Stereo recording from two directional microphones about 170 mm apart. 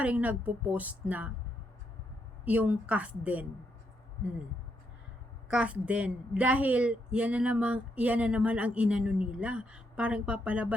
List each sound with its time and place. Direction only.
0.0 s a woman's voice: 10° right (ahead or behind)
2.4 s a woman's voice: 10° right (ahead or behind)
5.5 s a woman's voice: 5° right (ahead or behind)